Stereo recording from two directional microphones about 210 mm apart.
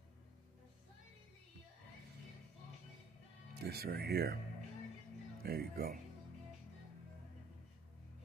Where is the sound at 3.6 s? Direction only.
50° right (ahead or behind).